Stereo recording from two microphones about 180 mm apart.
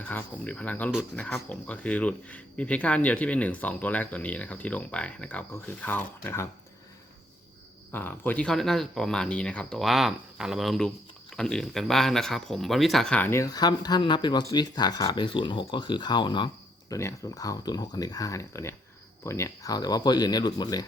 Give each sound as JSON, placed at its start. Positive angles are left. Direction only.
{"t": 0.0, "sound": "speech", "side_deg": 10}
{"t": 7.9, "sound": "speech", "side_deg": 10}